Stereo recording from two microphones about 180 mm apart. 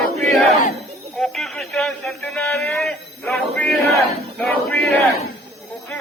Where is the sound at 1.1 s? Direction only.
Centre (ahead or behind).